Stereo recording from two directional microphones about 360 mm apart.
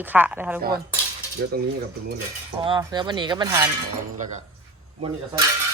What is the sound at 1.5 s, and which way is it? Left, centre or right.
Speech, right.